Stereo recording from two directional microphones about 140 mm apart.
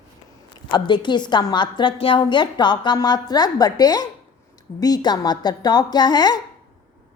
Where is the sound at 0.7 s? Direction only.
35° left (ahead or behind).